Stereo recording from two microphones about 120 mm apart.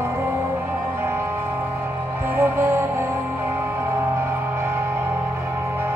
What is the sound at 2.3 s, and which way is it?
Music, 20° right (ahead or behind).